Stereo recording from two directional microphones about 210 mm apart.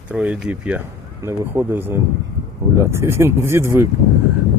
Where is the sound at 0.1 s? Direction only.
5° right (ahead or behind).